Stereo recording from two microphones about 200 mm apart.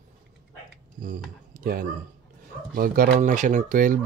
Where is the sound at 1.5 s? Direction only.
45° right (ahead or behind).